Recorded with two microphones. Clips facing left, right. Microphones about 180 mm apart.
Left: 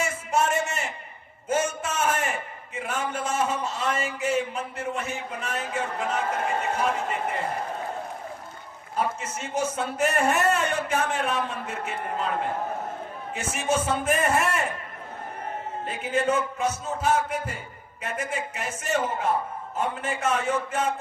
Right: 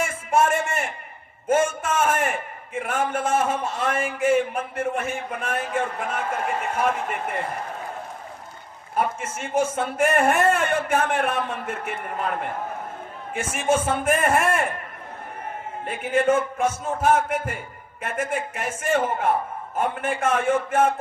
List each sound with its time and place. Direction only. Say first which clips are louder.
0.0 s a sound: right 4 dB; 50° right (ahead or behind)
1.5 s a man's voice: right 5 dB; 50° right (ahead or behind)
9.0 s a man's voice: right 3 dB; 55° right (ahead or behind)
13.3 s a man's voice: right 4 dB; 55° right (ahead or behind)
15.9 s a man's voice: right 5 dB; 55° right (ahead or behind)